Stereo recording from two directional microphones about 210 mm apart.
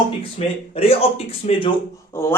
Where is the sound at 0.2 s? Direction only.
30° left (ahead or behind).